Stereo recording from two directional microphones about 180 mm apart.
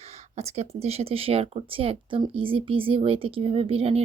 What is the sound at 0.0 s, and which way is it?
Speech, 35° right (ahead or behind).